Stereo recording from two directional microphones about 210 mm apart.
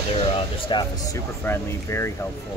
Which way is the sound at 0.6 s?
20° left (ahead or behind).